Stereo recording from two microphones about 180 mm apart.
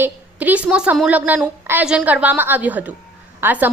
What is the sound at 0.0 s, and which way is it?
A woman's voice, 10° right (ahead or behind).